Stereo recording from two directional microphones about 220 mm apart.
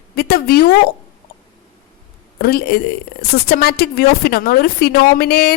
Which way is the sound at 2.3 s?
45° left (ahead or behind).